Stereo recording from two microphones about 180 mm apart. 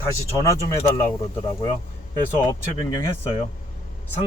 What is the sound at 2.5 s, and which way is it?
Speech, 20° left (ahead or behind).